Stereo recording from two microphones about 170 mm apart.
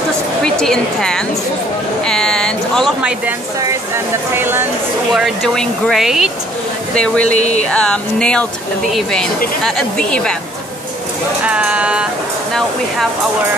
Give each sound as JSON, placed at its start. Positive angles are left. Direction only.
{"t": 0.4, "sound": "speech", "side_deg": 5}
{"t": 2.0, "sound": "a sound", "side_deg": 5}
{"t": 3.9, "sound": "speech", "side_deg": -15}
{"t": 5.1, "sound": "speech", "side_deg": 0}
{"t": 7.3, "sound": "a sound", "side_deg": 40}
{"t": 7.7, "sound": "speech", "side_deg": 5}
{"t": 11.4, "sound": "speech", "side_deg": -5}